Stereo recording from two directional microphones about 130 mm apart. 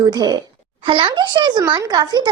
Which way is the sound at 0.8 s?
40° right (ahead or behind).